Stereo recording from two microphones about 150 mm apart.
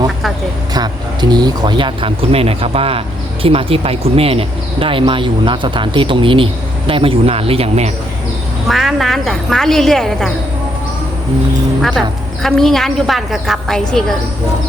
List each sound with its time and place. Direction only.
0.7 s speech: 25° right (ahead or behind); by 7.9 s 45° right (ahead or behind)
8.6 s a woman's voice: centre (ahead or behind)
11.8 s a woman's voice: centre (ahead or behind)